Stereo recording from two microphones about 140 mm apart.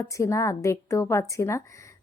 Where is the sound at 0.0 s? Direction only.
20° left (ahead or behind).